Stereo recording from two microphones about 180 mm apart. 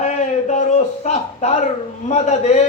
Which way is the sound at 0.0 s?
40° left (ahead or behind).